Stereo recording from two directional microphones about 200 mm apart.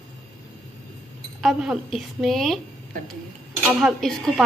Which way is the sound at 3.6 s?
Centre (ahead or behind).